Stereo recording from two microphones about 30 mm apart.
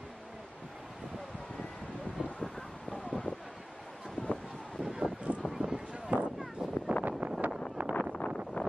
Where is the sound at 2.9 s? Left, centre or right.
Left.